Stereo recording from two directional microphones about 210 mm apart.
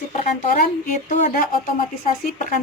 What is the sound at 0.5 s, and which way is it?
Speech, 40° left (ahead or behind).